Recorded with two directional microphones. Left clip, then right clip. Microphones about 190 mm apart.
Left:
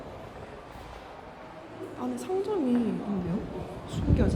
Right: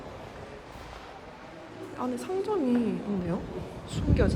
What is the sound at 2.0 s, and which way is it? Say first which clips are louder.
Speech: even; 10° left (ahead or behind).